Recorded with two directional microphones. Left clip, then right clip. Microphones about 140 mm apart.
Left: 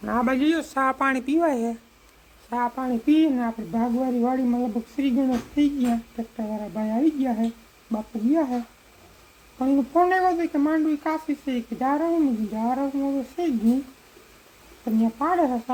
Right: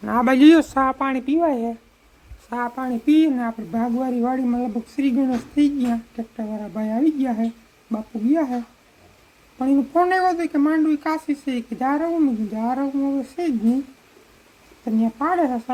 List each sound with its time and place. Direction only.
0.0 s a man's voice: 55° right (ahead or behind)
0.3 s a man's voice: 90° right
0.9 s speech: 20° right (ahead or behind)
2.7 s speech: centre (ahead or behind)
3.7 s a woman's voice: 20° right (ahead or behind)
9.6 s a woman's voice: 15° right (ahead or behind)
14.8 s a woman's voice: 15° right (ahead or behind)